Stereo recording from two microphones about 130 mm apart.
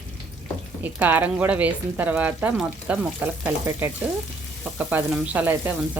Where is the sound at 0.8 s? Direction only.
15° right (ahead or behind).